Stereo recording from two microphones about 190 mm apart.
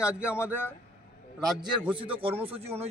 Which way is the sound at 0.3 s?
10° left (ahead or behind).